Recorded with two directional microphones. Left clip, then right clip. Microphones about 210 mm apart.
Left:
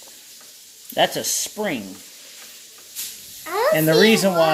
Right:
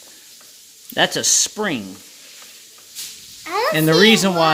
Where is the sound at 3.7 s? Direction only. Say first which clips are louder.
Right 2 dB; 35° right (ahead or behind).